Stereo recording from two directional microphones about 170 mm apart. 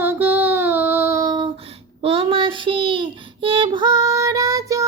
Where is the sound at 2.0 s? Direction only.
35° right (ahead or behind).